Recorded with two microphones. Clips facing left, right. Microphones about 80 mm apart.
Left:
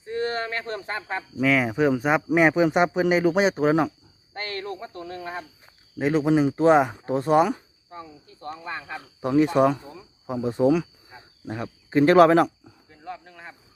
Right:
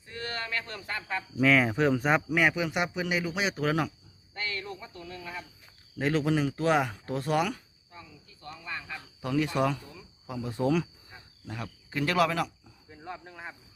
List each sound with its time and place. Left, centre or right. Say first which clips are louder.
0.0 s speech: left 10 dB; left
1.4 s speech: left 2 dB; centre
2.3 s speech: left 8 dB; left
4.4 s speech: left 5 dB; left
6.0 s speech: left 6 dB; centre
7.9 s speech: left 9 dB; left
11.1 s cricket: left 6 dB; centre
11.4 s speech: left 7 dB; left
12.9 s wild animals: left 3 dB; centre